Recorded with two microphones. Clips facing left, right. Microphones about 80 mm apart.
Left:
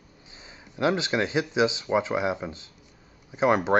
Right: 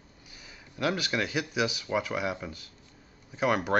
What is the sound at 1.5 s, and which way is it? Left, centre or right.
Speech, left.